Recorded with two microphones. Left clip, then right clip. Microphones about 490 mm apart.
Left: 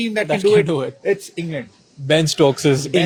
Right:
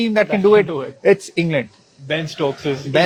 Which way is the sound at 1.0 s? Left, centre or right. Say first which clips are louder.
Right 6 dB; right.